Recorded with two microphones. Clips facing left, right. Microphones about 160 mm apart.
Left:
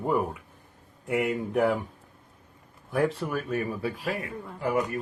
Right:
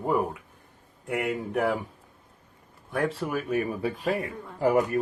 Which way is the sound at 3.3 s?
15° right (ahead or behind).